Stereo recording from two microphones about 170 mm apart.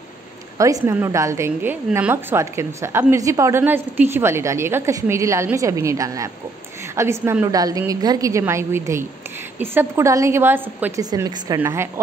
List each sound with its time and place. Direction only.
0.6 s a woman's voice: 20° right (ahead or behind)